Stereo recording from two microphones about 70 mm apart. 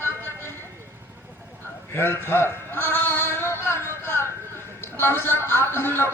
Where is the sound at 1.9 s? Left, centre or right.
Left.